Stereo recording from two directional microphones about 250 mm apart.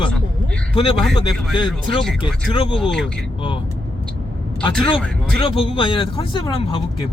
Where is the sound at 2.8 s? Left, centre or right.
Centre.